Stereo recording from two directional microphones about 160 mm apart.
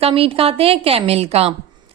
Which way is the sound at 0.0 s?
35° right (ahead or behind).